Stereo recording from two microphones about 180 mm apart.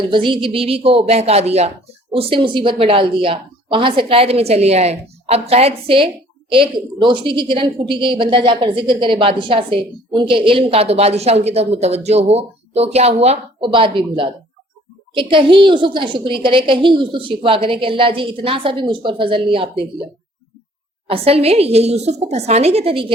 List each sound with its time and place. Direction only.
0.1 s a woman's voice: 25° right (ahead or behind)
21.1 s a woman's voice: 35° right (ahead or behind)